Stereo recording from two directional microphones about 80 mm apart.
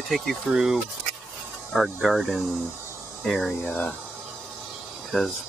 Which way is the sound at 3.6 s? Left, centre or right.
Left.